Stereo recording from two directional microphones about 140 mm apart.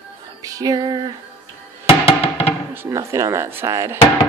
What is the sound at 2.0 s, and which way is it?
Music, 45° left (ahead or behind).